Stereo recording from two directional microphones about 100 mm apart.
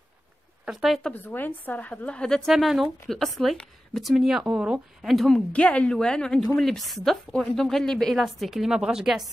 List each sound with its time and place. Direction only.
0.7 s speech: 5° right (ahead or behind)
1.1 s a woman's voice: 20° left (ahead or behind)
2.5 s speech: 5° right (ahead or behind)